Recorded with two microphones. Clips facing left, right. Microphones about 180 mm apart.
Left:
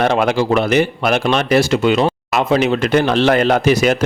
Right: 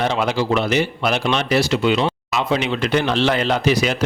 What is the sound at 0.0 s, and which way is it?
Speech, 55° left (ahead or behind).